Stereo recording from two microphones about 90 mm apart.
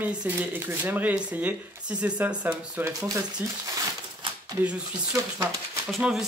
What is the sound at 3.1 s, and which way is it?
Speech, 40° right (ahead or behind).